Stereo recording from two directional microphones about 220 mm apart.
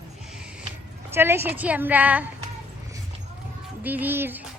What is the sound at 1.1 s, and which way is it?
A woman's voice, 10° right (ahead or behind).